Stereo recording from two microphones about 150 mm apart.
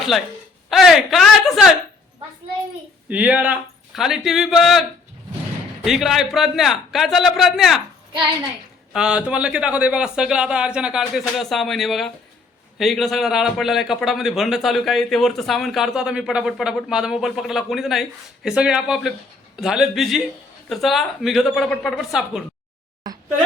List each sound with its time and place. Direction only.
0.7 s a man's voice: centre (ahead or behind)
3.1 s a man's voice: 10° right (ahead or behind)
8.9 s a man's voice: 5° right (ahead or behind)
23.1 s a sound: 25° right (ahead or behind)